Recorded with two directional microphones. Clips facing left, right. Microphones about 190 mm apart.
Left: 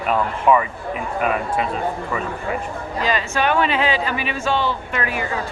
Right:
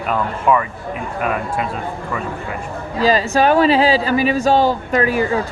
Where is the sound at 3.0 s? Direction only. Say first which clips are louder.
Right 7 dB; 35° right (ahead or behind).